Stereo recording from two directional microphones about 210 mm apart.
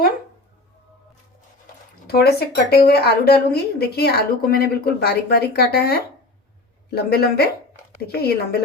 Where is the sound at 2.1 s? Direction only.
50° left (ahead or behind).